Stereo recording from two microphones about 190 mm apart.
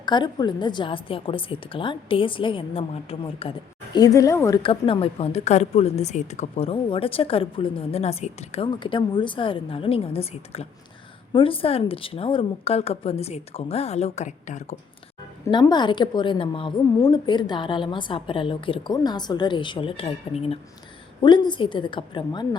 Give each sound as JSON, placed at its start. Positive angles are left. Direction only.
{"t": 0.0, "sound": "a woman's voice", "side_deg": 25}
{"t": 3.9, "sound": "speech", "side_deg": 20}
{"t": 4.6, "sound": "a woman's voice", "side_deg": 30}
{"t": 15.4, "sound": "a woman's voice", "side_deg": 20}